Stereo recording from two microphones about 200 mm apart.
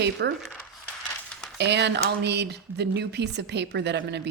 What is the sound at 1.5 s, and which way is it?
Speech, 60° right (ahead or behind).